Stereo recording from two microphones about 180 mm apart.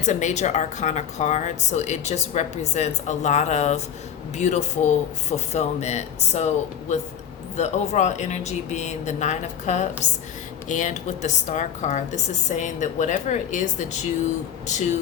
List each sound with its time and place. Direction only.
0.0 s a woman's voice: 40° left (ahead or behind)